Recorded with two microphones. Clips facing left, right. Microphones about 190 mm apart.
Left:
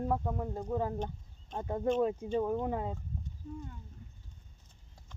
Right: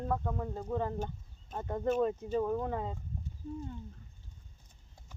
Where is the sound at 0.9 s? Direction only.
5° right (ahead or behind).